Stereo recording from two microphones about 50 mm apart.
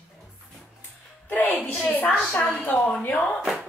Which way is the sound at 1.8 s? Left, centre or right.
Left.